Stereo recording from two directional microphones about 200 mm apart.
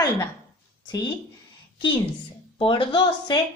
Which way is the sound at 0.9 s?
20° left (ahead or behind).